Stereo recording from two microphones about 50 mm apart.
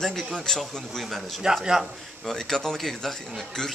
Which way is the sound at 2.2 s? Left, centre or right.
Centre.